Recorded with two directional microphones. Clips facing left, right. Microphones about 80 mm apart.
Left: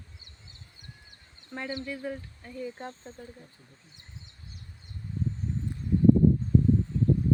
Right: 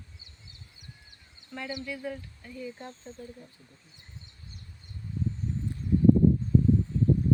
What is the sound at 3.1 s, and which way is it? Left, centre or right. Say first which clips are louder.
Speech: right 1 dB; left.